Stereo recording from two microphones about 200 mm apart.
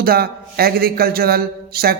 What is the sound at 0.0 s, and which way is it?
A man's voice, 50° right (ahead or behind).